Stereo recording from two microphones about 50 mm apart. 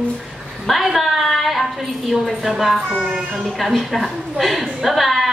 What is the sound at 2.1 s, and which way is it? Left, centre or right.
A woman's voice, centre.